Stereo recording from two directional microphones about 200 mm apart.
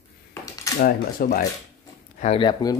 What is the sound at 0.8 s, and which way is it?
Speech, 45° left (ahead or behind).